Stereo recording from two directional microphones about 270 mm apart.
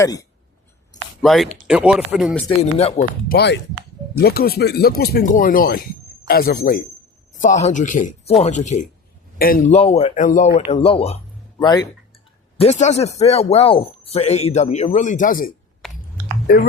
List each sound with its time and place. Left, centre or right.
0.0 s speech: centre
1.2 s speech: centre
2.6 s speech: left
12.5 s speech: left
15.8 s chewing: centre